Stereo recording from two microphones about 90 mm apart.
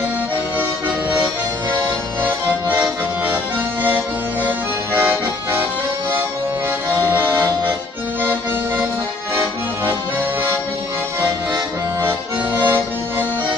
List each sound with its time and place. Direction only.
0.6 s music: 25° right (ahead or behind)
2.2 s accordion: 20° right (ahead or behind)
4.5 s accordion: 25° right (ahead or behind)
7.1 s accordion: 20° right (ahead or behind)
12.0 s accordion: 25° right (ahead or behind)